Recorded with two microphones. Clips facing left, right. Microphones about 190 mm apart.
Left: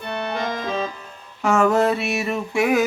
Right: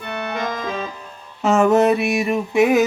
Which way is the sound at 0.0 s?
30° left (ahead or behind).